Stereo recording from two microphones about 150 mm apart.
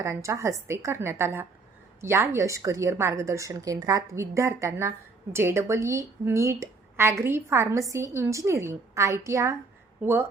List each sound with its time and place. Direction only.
0.0 s a woman's voice: 20° right (ahead or behind)